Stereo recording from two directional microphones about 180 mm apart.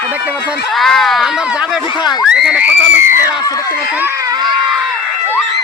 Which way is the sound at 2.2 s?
5° right (ahead or behind).